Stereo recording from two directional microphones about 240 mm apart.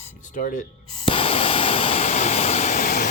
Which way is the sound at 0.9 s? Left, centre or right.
Left.